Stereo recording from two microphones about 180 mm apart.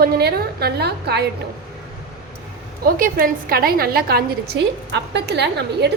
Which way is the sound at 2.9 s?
50° right (ahead or behind).